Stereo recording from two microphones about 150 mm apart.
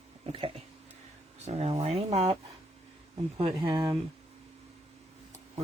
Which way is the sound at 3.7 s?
25° right (ahead or behind).